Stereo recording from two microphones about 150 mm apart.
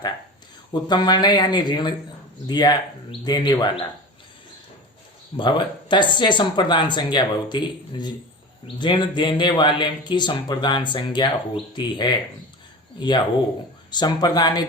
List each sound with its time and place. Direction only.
0.7 s speech: 30° left (ahead or behind)
5.4 s speech: 30° left (ahead or behind)